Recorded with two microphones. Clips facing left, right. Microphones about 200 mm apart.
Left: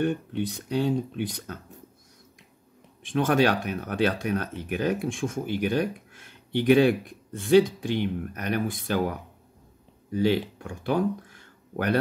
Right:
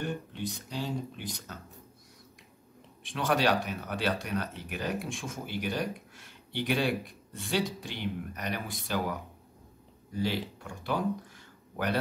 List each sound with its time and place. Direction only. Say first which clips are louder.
0.0 s speech: left 8 dB; 60° left (ahead or behind)
3.0 s speech: left 6 dB; 50° left (ahead or behind)
10.1 s speech: left 8 dB; 55° left (ahead or behind)